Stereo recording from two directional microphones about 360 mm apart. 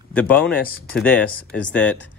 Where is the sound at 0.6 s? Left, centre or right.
Left.